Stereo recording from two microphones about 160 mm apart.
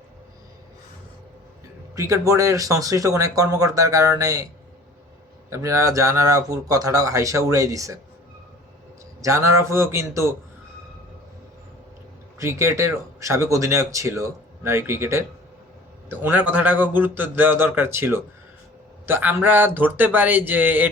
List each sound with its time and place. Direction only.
2.0 s speech: 20° right (ahead or behind)
5.5 s speech: 20° right (ahead or behind)
9.2 s speech: 20° right (ahead or behind)
12.4 s speech: 15° right (ahead or behind)